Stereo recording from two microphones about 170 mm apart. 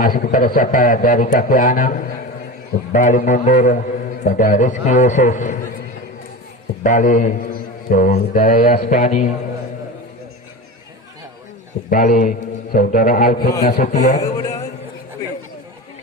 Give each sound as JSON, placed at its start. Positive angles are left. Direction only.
{"t": 0.0, "sound": "a man's voice", "side_deg": 60}
{"t": 6.8, "sound": "a man's voice", "side_deg": 50}
{"t": 11.9, "sound": "a man's voice", "side_deg": 50}